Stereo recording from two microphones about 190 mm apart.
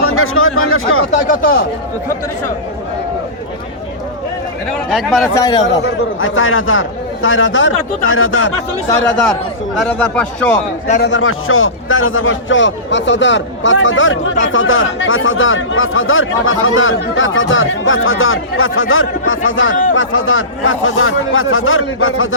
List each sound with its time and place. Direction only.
0.0 s speech: 90° left
1.3 s speech: 50° left (ahead or behind)
4.9 s a man's voice: centre (ahead or behind)
5.4 s a man's voice: 20° left (ahead or behind)
5.6 s a man's voice: 80° left
9.7 s a man's voice: 5° left (ahead or behind)
11.0 s a man's voice: 85° left